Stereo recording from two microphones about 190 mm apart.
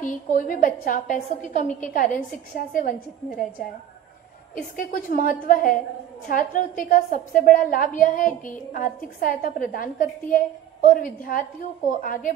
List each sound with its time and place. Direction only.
0.0 s a woman's voice: 45° left (ahead or behind)
4.7 s a woman's voice: 45° left (ahead or behind)